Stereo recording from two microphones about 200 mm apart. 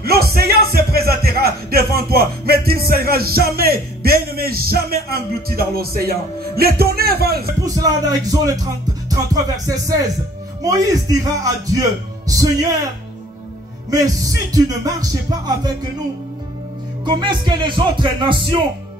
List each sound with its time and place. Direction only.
0.0 s speech: 50° right (ahead or behind)
7.6 s music: 20° right (ahead or behind)
12.3 s speech: 15° right (ahead or behind)
13.8 s music: 15° right (ahead or behind)
17.0 s speech: 25° right (ahead or behind)